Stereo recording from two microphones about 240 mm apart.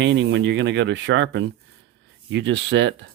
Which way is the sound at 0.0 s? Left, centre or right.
Right.